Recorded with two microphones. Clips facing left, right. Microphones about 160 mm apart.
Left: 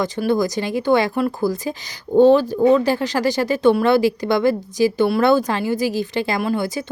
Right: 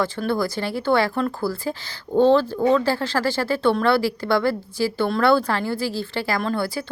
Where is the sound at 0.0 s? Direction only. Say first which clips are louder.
Left 4 dB; 15° left (ahead or behind).